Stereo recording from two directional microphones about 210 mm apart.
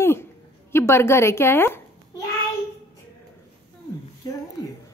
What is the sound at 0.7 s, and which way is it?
A child's voice, 10° left (ahead or behind).